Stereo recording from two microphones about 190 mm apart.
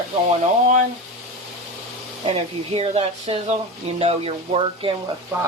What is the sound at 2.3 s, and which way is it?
Speech, 30° right (ahead or behind).